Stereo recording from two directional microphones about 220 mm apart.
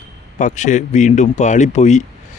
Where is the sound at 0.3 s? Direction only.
35° left (ahead or behind).